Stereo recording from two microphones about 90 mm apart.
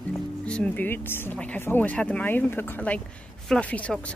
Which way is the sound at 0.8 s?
25° left (ahead or behind).